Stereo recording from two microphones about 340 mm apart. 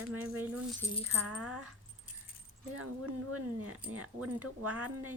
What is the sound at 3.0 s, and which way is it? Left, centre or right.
Speech, right.